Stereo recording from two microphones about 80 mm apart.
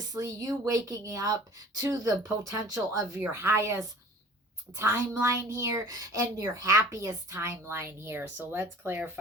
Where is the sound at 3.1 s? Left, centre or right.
Right.